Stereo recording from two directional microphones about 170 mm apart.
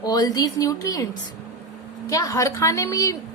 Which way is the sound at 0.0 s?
20° left (ahead or behind).